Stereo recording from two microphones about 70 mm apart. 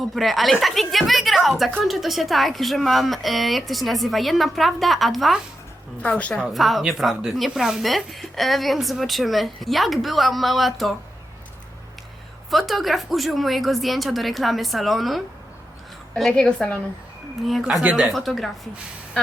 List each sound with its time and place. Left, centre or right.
0.0 s speech: centre
6.0 s a woman's voice: centre
6.4 s speech: centre
12.5 s speech: centre
16.3 s a woman's voice: centre
17.6 s speech: centre
18.1 s speech: centre